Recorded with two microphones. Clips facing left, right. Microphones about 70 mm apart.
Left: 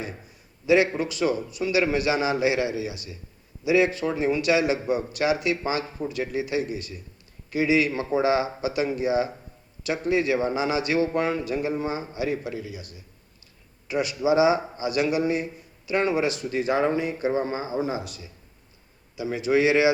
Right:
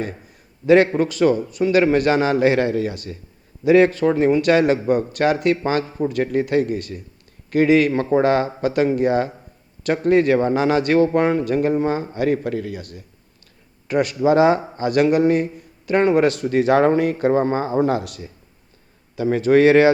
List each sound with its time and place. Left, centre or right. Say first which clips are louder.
0.6 s a man's voice: right 6 dB; right